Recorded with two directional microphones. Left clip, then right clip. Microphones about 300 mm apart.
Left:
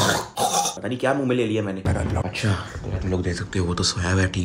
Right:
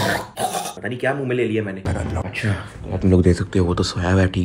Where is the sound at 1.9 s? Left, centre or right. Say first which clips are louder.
Even; centre.